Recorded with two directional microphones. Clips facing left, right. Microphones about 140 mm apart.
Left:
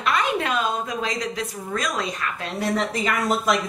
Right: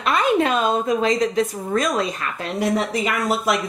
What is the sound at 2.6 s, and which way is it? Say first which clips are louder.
Speech: right 3 dB; 10° right (ahead or behind).